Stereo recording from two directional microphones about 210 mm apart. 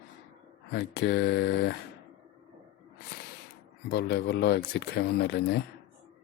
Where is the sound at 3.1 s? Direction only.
45° left (ahead or behind).